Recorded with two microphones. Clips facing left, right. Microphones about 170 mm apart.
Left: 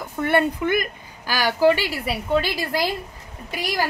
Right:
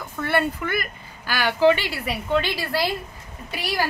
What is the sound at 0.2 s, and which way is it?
Speech, 15° left (ahead or behind).